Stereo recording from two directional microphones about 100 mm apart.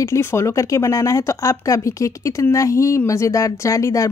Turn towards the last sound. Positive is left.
turn(degrees=35)  # may be behind; listen again after turning